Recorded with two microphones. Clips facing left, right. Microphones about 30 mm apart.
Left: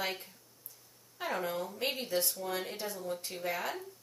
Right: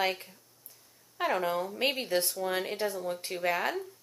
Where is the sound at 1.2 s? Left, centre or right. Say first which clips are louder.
Right 6 dB; right.